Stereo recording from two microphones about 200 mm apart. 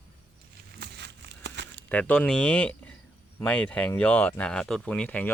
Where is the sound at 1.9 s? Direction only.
5° left (ahead or behind).